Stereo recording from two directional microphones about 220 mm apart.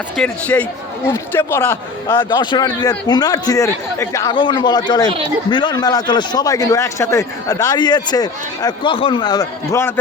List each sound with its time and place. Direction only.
0.2 s a man's voice: 5° left (ahead or behind)